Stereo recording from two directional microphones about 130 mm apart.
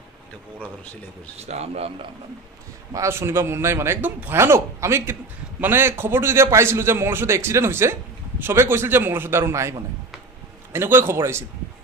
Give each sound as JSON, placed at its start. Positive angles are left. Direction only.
{"t": 1.4, "sound": "a man's voice", "side_deg": -55}
{"t": 2.9, "sound": "a man's voice", "side_deg": -20}